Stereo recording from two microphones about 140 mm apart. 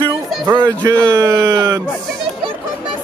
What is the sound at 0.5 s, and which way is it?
A man's voice, 20° right (ahead or behind).